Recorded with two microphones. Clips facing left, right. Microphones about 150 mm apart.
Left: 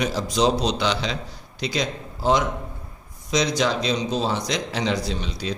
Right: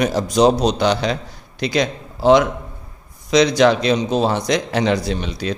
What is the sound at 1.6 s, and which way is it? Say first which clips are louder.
A man's voice: right 6 dB; 65° right (ahead or behind).